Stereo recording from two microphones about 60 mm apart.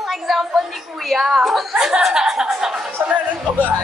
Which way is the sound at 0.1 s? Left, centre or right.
Centre.